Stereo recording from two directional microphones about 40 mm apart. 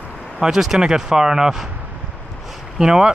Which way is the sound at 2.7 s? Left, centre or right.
Centre.